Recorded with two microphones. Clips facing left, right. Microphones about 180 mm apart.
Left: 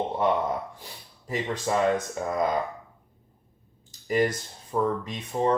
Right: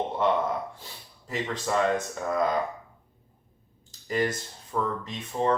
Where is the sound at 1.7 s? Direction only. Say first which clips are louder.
Left 1 dB; 15° left (ahead or behind).